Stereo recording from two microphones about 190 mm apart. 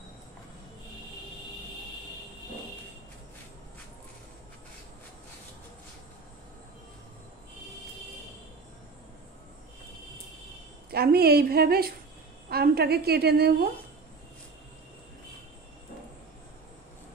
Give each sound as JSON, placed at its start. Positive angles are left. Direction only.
{"t": 10.9, "sound": "a woman's voice", "side_deg": -55}